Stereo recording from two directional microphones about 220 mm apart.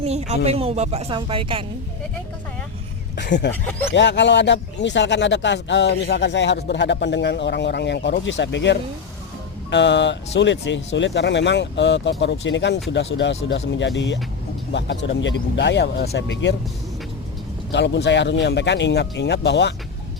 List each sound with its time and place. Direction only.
0.0 s speech: 30° right (ahead or behind)
3.2 s speech: 50° left (ahead or behind)
3.5 s speech: 10° left (ahead or behind)
3.9 s speech: 55° left (ahead or behind)
17.7 s speech: 50° left (ahead or behind)